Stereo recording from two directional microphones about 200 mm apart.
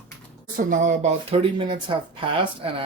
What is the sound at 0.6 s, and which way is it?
Speech, 40° right (ahead or behind).